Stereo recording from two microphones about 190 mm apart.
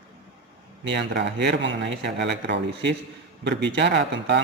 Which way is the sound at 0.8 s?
65° right (ahead or behind).